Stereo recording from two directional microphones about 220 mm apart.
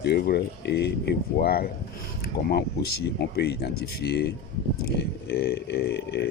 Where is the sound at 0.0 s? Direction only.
50° left (ahead or behind).